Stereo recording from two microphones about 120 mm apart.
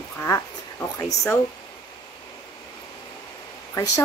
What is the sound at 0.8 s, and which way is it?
Speech, 25° left (ahead or behind).